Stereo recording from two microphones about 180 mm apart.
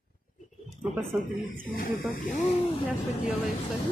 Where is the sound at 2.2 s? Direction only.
40° left (ahead or behind).